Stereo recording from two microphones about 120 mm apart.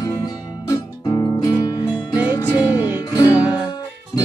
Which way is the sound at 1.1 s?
30° left (ahead or behind).